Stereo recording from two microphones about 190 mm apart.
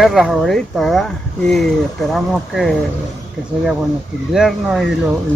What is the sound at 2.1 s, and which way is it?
Speech, centre (ahead or behind).